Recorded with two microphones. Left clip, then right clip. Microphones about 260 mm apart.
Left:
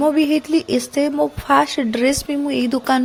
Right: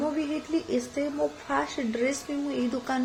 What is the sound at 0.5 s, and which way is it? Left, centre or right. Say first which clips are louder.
A woman's voice: left 10 dB; left.